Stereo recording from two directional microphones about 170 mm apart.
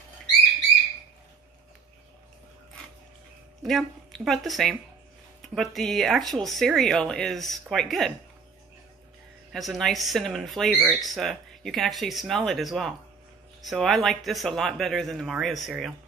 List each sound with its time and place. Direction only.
3.6 s speech: centre (ahead or behind)
9.5 s speech: centre (ahead or behind)